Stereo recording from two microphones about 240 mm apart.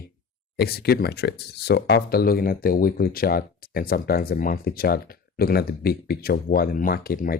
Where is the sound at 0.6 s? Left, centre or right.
Left.